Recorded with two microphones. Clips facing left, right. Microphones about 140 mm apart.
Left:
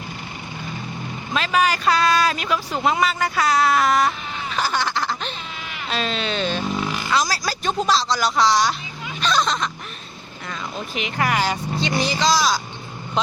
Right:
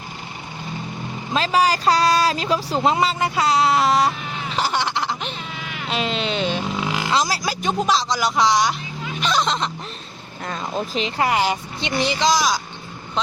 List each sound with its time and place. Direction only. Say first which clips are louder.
1.3 s speech: right 2 dB; 30° right (ahead or behind)
4.5 s baby laughter: right 1 dB; 25° right (ahead or behind)
5.9 s speech: right 1 dB; 20° right (ahead or behind)
10.4 s speech: right 5 dB; 40° right (ahead or behind); by 12.5 s 15° right (ahead or behind)